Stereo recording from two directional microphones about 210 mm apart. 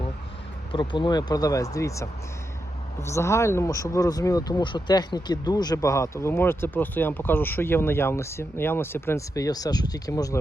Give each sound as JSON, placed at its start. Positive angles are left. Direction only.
{"t": 0.7, "sound": "speech", "side_deg": 25}